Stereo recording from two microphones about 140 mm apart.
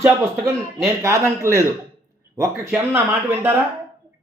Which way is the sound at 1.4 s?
20° right (ahead or behind).